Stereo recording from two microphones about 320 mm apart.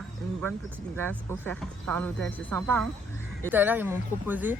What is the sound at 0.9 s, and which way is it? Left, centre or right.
Speech, centre.